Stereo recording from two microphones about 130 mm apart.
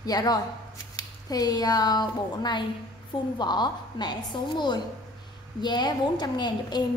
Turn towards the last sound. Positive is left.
turn(degrees=35)  # may be behind; listen again after turning